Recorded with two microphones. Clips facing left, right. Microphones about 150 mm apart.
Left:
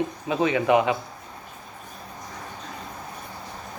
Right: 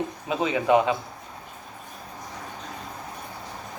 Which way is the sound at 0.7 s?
20° left (ahead or behind).